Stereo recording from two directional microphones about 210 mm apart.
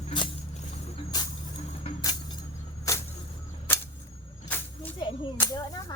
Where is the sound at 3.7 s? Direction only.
10° left (ahead or behind).